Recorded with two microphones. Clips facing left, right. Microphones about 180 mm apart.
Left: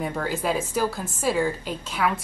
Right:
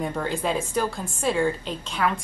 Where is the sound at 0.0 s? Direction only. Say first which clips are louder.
Even; 5° left (ahead or behind).